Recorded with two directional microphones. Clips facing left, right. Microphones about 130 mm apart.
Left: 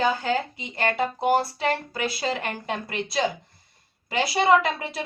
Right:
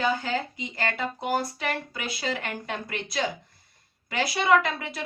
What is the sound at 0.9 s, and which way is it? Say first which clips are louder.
A woman's voice: left 7 dB; 25° left (ahead or behind).